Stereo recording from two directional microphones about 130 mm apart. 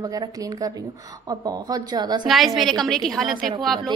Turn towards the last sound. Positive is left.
turn(degrees=0)  # may be behind; listen again after turning